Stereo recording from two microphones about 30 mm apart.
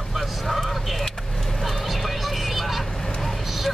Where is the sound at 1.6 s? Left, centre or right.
Centre.